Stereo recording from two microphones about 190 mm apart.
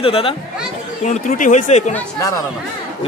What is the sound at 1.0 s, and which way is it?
Speech, 40° left (ahead or behind).